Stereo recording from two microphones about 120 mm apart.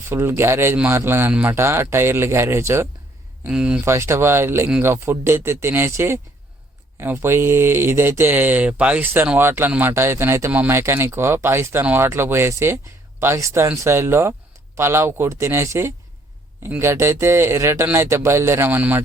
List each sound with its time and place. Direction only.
0.1 s speech: 20° right (ahead or behind)
3.4 s speech: 10° right (ahead or behind)
3.8 s speech: 20° right (ahead or behind)